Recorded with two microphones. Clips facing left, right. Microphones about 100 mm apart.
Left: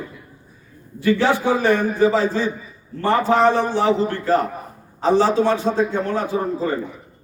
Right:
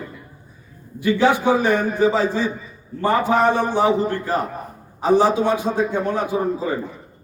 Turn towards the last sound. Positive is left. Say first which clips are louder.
# even
turn(degrees=-15)  # may be behind; listen again after turning